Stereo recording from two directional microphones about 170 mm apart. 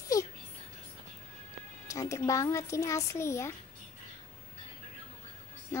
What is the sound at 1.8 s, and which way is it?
Speech, 20° left (ahead or behind).